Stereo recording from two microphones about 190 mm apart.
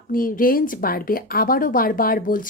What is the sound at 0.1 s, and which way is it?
Speech, 50° left (ahead or behind).